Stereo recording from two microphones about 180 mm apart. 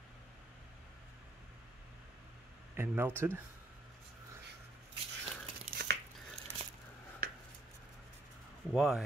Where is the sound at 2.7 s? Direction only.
10° right (ahead or behind).